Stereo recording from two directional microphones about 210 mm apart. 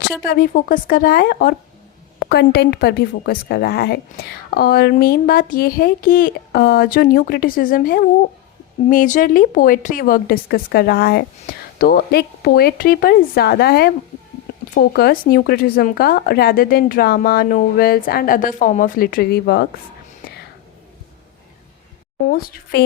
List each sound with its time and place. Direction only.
0.3 s a woman's voice: 45° left (ahead or behind)
20.2 s whispering: 45° left (ahead or behind)
22.3 s a woman's voice: 45° left (ahead or behind)